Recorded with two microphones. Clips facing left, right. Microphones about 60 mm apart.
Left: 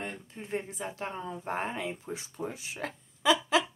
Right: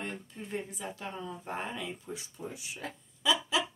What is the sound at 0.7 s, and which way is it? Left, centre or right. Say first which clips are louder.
Speech: left 3 dB; left.